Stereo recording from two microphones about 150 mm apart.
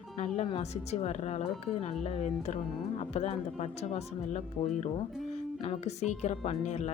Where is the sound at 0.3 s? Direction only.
45° left (ahead or behind).